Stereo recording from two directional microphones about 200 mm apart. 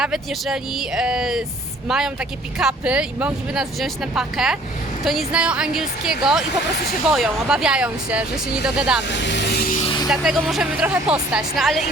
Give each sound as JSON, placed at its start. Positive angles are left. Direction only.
{"t": 0.0, "sound": "speech", "side_deg": 0}
{"t": 9.0, "sound": "vehicle", "side_deg": 60}
{"t": 9.8, "sound": "music", "side_deg": 25}
{"t": 10.1, "sound": "speech", "side_deg": 0}